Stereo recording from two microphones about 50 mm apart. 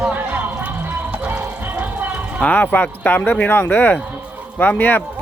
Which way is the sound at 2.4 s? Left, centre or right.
Left.